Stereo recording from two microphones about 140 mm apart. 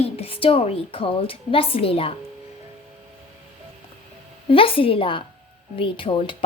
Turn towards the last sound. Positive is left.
turn(degrees=40)  # may be behind; listen again after turning